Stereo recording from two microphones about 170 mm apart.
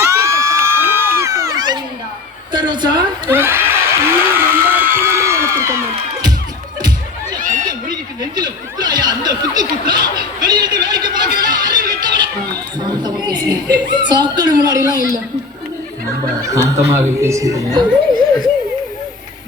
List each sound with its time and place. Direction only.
0.0 s crowd: 15° right (ahead or behind)
2.5 s a sound: 25° right (ahead or behind)
3.2 s a sound: 15° right (ahead or behind)
7.3 s chatter: 50° right (ahead or behind)
7.7 s snicker: 25° right (ahead or behind)
10.2 s a sound: 25° right (ahead or behind)
11.3 s music: 25° right (ahead or behind)
12.8 s chuckle: 25° right (ahead or behind)
13.9 s speech: 25° right (ahead or behind)
16.5 s speech: 20° right (ahead or behind)